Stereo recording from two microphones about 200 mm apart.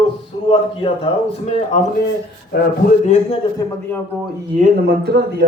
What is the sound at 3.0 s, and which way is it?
Speech, 35° left (ahead or behind).